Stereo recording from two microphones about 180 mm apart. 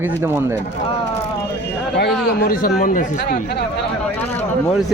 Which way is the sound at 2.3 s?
60° left (ahead or behind).